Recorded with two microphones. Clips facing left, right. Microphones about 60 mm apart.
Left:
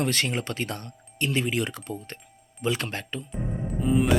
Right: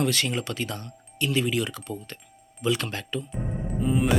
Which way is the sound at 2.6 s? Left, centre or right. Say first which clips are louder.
Right 1 dB; left.